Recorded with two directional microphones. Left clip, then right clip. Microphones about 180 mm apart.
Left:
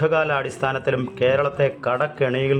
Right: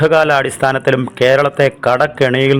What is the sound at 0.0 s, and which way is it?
A man's voice, 35° right (ahead or behind).